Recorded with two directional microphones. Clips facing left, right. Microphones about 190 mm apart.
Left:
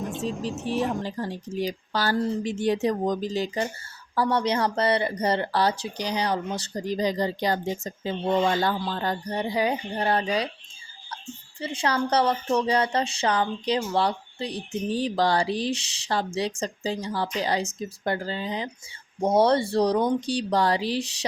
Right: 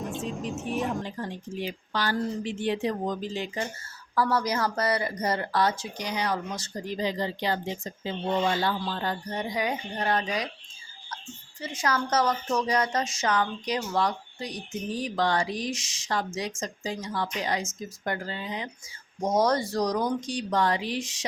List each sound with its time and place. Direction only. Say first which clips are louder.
0.0 s speech: left 3 dB; centre (ahead or behind)
1.0 s speech: left 4 dB; 35° left (ahead or behind)
11.6 s speech: left 3 dB; 30° left (ahead or behind)